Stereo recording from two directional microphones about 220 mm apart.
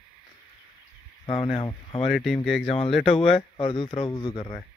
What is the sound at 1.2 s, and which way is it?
Speech, 20° left (ahead or behind).